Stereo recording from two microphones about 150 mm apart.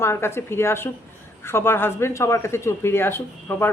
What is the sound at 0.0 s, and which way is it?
Speech, 15° left (ahead or behind).